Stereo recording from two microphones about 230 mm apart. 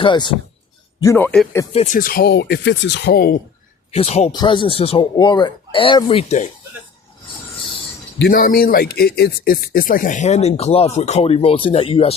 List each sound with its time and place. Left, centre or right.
0.0 s speech: left
1.0 s speech: centre
1.7 s speech: left
3.9 s speech: left
8.2 s speech: left